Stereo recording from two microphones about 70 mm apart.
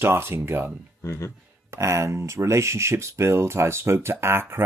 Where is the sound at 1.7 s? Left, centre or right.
Right.